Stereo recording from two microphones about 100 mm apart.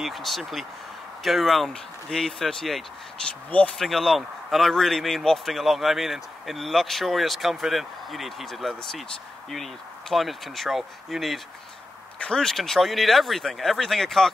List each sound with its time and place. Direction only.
0.0 s speech: centre (ahead or behind)
3.4 s speech: 15° left (ahead or behind)
3.7 s speech: 5° left (ahead or behind)